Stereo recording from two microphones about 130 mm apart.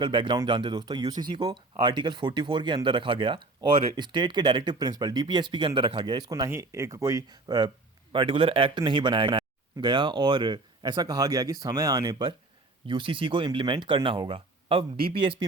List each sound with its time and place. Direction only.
0.0 s speech: 40° right (ahead or behind)
12.9 s speech: 40° right (ahead or behind)